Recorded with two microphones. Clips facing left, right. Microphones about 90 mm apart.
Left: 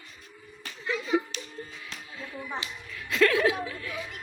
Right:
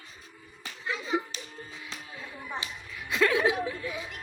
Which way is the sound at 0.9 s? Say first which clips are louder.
Left 3 dB; 20° right (ahead or behind).